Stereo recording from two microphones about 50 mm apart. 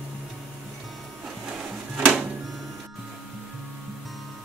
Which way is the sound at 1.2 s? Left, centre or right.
Centre.